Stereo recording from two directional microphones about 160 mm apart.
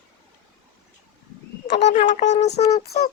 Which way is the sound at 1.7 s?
45° left (ahead or behind).